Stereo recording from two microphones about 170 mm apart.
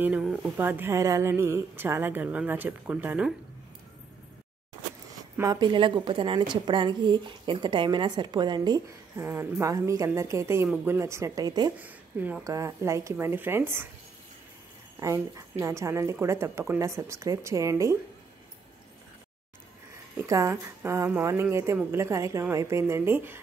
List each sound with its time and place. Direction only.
0.0 s speech: 5° right (ahead or behind)
5.4 s a woman's voice: 25° right (ahead or behind)
11.8 s speech: 10° right (ahead or behind)
15.0 s speech: 15° right (ahead or behind)
20.2 s speech: 15° right (ahead or behind)